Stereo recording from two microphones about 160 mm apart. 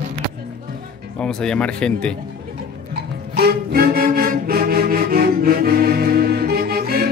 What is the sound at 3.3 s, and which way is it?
Music, 75° right (ahead or behind).